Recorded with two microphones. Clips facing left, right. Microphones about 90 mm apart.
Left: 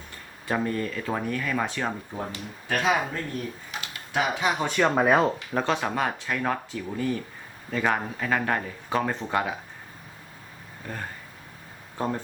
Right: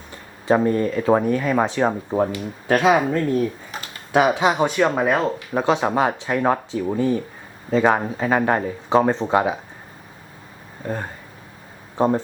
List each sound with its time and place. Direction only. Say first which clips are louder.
0.4 s speech: right 9 dB; 25° right (ahead or behind)
2.0 s speech: right 13 dB; 55° right (ahead or behind)
2.6 s speech: right 8 dB; 75° right (ahead or behind)
3.7 s typing: right 3 dB; 40° right (ahead or behind)
4.4 s speech: right 7 dB; 20° right (ahead or behind)
4.7 s speech: right 2 dB; 5° right (ahead or behind)
5.5 s speech: right 8 dB; 15° right (ahead or behind)
10.8 s speech: right 8 dB; 25° right (ahead or behind)